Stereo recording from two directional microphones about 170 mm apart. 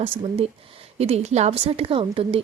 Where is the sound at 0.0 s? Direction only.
35° right (ahead or behind).